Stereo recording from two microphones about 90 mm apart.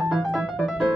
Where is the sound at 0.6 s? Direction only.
10° left (ahead or behind).